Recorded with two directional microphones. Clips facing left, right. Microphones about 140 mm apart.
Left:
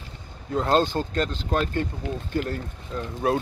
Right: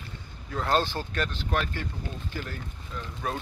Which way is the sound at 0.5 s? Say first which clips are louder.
Left 5 dB; 25° left (ahead or behind).